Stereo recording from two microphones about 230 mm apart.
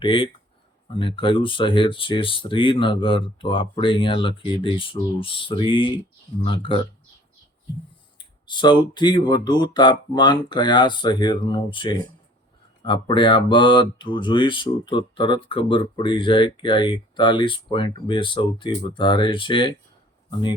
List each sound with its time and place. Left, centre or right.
0.0 s speech: left
8.2 s speech: centre